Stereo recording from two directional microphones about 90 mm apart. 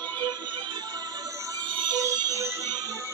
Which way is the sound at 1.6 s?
65° right (ahead or behind).